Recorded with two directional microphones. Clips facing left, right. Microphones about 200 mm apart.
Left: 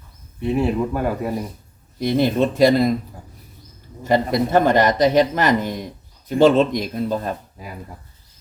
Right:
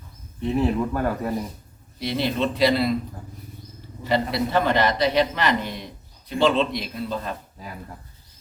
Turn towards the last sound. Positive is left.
turn(degrees=10)  # may be behind; listen again after turning